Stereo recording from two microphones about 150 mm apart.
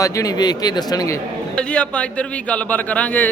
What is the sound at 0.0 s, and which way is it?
A man's voice, 25° left (ahead or behind).